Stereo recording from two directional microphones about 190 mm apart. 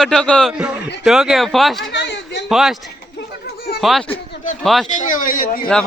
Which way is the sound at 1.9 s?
65° left (ahead or behind).